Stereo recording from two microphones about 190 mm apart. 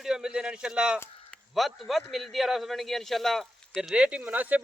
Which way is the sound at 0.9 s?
10° left (ahead or behind).